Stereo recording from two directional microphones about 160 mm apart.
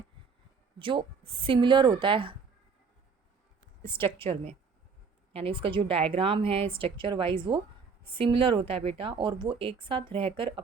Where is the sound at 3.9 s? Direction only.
35° right (ahead or behind).